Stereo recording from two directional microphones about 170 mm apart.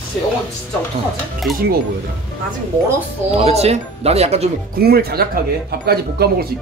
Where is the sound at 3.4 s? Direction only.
40° right (ahead or behind).